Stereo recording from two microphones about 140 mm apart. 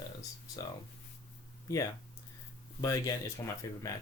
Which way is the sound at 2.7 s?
25° left (ahead or behind).